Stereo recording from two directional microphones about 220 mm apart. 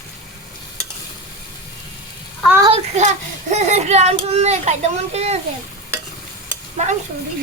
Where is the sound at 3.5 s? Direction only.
30° right (ahead or behind).